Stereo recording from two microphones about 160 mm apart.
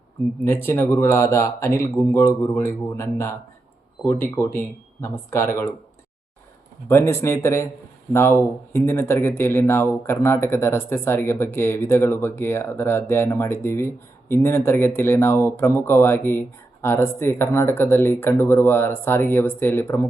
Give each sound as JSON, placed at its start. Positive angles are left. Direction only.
{"t": 0.4, "sound": "speech", "side_deg": 15}
{"t": 6.8, "sound": "speech", "side_deg": 15}